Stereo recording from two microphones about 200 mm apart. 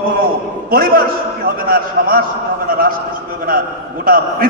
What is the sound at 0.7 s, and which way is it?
A man's voice, 45° right (ahead or behind).